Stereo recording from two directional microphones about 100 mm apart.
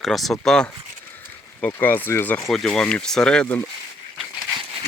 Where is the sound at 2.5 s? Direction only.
5° left (ahead or behind).